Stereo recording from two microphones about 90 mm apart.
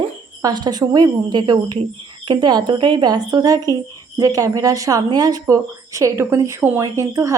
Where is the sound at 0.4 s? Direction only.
50° right (ahead or behind).